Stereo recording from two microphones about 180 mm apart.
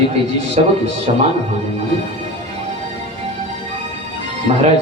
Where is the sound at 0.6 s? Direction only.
40° right (ahead or behind).